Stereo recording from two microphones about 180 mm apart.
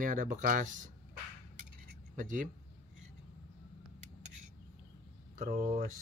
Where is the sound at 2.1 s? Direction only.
45° right (ahead or behind).